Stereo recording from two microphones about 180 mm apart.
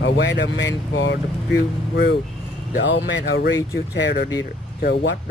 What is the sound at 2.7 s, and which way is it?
Speech, 80° left.